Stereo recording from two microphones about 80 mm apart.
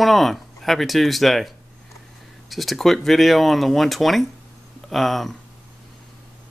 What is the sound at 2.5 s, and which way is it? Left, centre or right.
Speech, centre.